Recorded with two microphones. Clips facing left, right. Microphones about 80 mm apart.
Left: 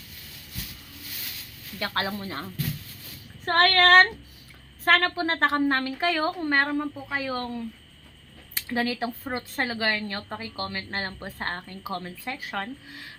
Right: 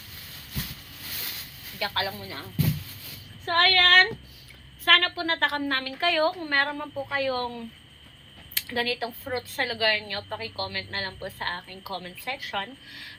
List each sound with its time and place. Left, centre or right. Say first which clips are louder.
1.8 s child singing: left 1 dB; left
4.9 s a woman's voice: left 1 dB; left
8.5 s a woman's voice: left 2 dB; left